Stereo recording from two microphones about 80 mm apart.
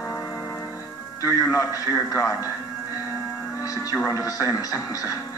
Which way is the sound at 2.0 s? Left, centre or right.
Left.